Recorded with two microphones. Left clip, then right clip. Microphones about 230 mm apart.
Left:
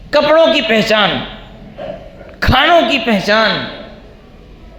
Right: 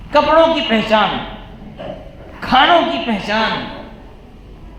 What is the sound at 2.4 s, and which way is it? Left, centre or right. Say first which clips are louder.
Speech: left 1 dB; left.